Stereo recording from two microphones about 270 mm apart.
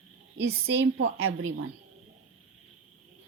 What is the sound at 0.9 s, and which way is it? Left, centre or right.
Speech, right.